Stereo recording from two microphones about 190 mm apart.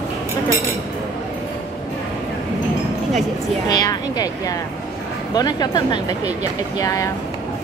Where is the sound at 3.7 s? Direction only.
20° left (ahead or behind).